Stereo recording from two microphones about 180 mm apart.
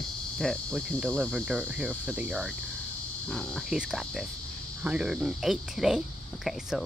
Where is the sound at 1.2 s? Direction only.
10° right (ahead or behind).